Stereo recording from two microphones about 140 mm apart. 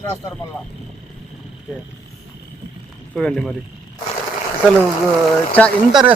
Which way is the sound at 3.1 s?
5° left (ahead or behind).